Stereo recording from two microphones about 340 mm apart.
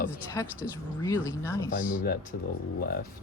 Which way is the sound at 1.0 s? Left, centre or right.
Centre.